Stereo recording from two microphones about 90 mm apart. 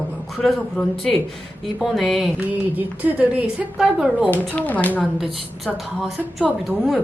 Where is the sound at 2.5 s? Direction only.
20° right (ahead or behind).